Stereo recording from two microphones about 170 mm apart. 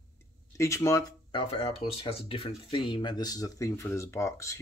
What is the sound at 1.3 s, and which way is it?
Speech, 30° left (ahead or behind).